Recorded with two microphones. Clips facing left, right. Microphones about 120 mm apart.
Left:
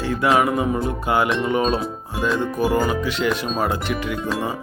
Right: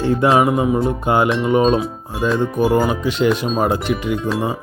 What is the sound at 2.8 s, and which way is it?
Music, 25° right (ahead or behind).